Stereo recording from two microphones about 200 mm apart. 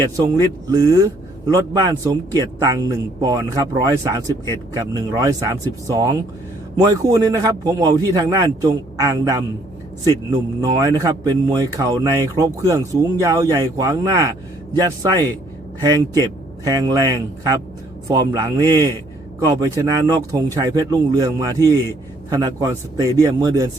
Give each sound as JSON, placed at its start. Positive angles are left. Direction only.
{"t": 0.0, "sound": "a man's voice", "side_deg": -20}
{"t": 10.6, "sound": "a man's voice", "side_deg": -20}
{"t": 15.8, "sound": "a man's voice", "side_deg": -20}